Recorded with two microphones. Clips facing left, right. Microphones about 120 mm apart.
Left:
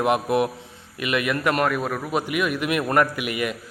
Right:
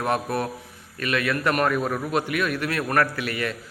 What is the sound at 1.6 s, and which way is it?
A man's voice, centre (ahead or behind).